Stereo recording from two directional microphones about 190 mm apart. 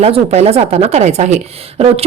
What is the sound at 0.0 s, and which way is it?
Speech, 35° right (ahead or behind).